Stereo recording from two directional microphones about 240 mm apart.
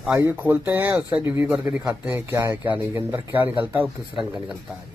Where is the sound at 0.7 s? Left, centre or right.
Centre.